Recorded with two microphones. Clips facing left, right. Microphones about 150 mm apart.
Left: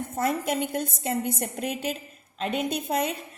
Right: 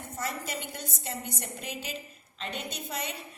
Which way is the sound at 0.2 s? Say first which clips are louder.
Left 10 dB; 55° left (ahead or behind).